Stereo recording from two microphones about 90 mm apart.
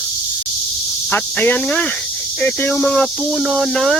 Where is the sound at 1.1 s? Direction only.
20° left (ahead or behind).